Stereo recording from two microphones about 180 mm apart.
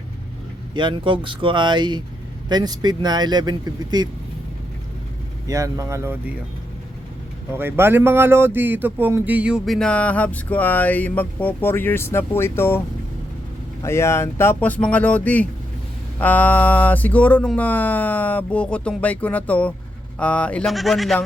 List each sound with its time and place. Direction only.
0.7 s speech: 25° right (ahead or behind)
5.5 s speech: 20° right (ahead or behind)
7.5 s speech: 10° right (ahead or behind); by 12.8 s 15° left (ahead or behind)
13.8 s speech: 15° left (ahead or behind)